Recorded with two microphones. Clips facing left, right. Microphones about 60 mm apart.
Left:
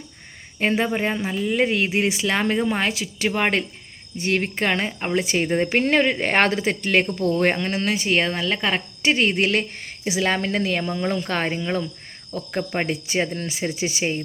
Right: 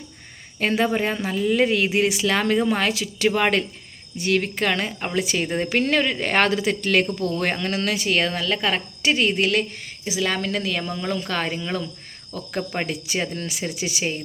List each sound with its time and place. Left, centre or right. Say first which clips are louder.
0.6 s speech: even; centre
4.2 s speech: right 1 dB; left
5.2 s speech: left 2 dB; left
5.5 s speech: left 3 dB; left